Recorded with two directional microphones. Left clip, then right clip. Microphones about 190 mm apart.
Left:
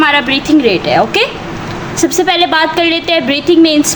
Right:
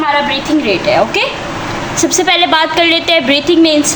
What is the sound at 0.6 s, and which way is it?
A woman's voice, 25° left (ahead or behind).